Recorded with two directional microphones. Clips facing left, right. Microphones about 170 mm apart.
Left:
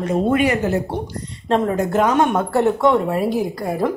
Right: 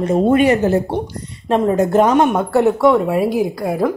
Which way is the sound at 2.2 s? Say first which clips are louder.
Right 3 dB; 10° right (ahead or behind).